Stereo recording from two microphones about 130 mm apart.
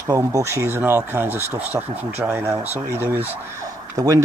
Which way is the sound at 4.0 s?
30° right (ahead or behind).